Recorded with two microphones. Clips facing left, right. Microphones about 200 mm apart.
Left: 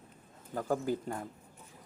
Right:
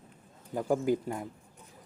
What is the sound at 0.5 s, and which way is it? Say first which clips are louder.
Speech: right 4 dB; 15° right (ahead or behind).